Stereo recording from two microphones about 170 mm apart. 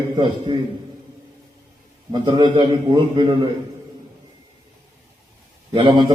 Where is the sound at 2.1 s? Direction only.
25° right (ahead or behind).